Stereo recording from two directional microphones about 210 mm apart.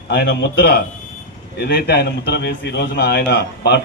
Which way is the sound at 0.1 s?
55° left (ahead or behind).